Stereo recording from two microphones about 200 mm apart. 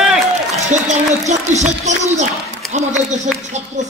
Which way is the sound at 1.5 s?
35° right (ahead or behind).